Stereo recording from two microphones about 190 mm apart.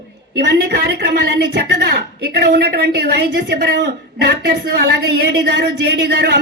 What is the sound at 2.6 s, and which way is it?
A man's voice, 60° right (ahead or behind).